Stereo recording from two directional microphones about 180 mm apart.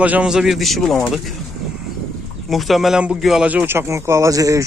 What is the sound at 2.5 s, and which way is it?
Speech, centre (ahead or behind).